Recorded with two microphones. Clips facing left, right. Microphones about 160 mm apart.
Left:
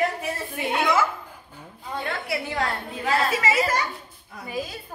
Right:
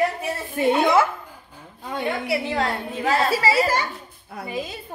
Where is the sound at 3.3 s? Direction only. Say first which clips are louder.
Right 3 dB; 35° right (ahead or behind).